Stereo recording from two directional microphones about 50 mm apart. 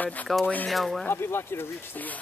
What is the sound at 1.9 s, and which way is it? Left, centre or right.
Speech, left.